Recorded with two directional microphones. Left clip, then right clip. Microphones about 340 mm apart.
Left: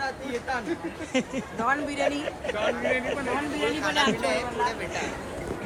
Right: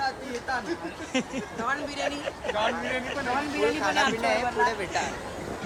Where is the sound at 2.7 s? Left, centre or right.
Centre.